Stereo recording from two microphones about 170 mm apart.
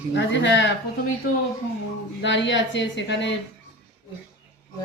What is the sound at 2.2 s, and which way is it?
A woman's voice, 90° left.